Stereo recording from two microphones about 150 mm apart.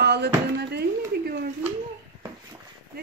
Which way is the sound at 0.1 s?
90° right.